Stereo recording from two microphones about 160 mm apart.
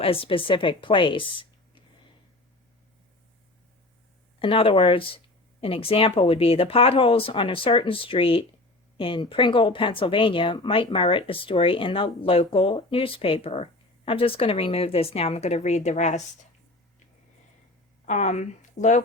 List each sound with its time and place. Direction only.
0.0 s speech: 35° left (ahead or behind)
4.4 s speech: 35° left (ahead or behind)
18.0 s speech: 50° left (ahead or behind)